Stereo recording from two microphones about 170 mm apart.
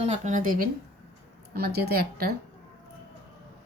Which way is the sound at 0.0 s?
45° right (ahead or behind).